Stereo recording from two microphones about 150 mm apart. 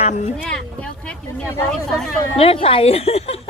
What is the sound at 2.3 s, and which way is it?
A woman's voice, 40° left (ahead or behind).